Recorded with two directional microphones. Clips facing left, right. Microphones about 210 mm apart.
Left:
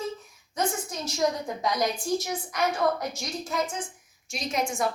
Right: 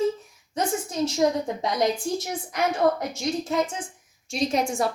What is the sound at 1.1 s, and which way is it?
A woman's voice, 25° right (ahead or behind).